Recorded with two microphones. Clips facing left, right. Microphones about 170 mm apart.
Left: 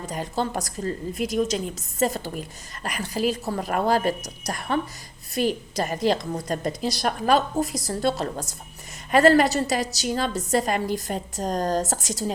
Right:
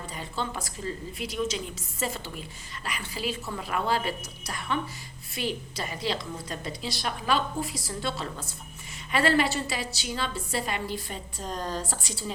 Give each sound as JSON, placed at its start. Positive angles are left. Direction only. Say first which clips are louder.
{"t": 0.0, "sound": "a woman's voice", "louder": "left 7 dB", "side_deg": 45}